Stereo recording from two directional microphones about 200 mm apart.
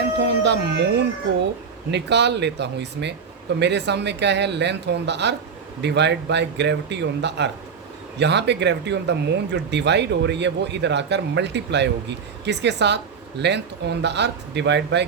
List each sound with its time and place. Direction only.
0.3 s speech: 60° right (ahead or behind)